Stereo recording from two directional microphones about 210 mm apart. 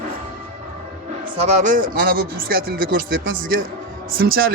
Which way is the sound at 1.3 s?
35° right (ahead or behind).